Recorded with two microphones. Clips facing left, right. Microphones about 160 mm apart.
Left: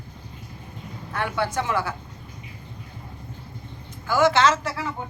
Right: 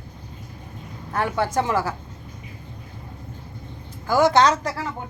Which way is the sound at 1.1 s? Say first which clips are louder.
Right 3 dB; 40° right (ahead or behind).